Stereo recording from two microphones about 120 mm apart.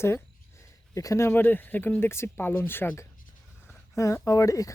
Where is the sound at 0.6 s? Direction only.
25° left (ahead or behind).